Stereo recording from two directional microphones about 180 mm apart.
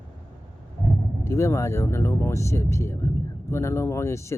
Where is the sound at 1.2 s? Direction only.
15° left (ahead or behind).